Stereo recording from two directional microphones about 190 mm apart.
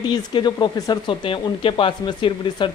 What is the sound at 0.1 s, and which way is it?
Speech, 20° left (ahead or behind).